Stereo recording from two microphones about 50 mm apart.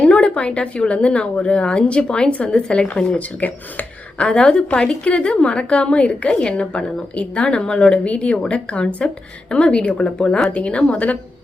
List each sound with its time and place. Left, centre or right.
0.0 s speech: centre
4.2 s speech: centre